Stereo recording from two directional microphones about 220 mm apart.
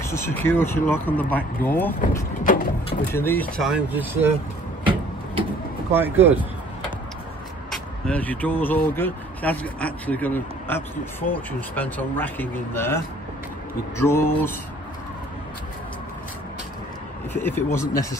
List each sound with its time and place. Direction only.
0.0 s speech: 10° left (ahead or behind)
2.0 s speech: 40° left (ahead or behind)
3.1 s speech: 10° left (ahead or behind); by 4.3 s 10° right (ahead or behind)
5.9 s speech: 10° right (ahead or behind)
7.7 s speech: 5° left (ahead or behind)
17.3 s speech: 10° left (ahead or behind)